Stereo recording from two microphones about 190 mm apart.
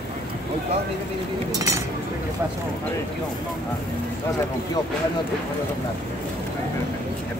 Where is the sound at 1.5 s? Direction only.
15° right (ahead or behind).